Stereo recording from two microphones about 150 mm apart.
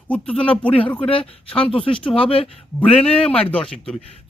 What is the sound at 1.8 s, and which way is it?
Speech, 35° left (ahead or behind).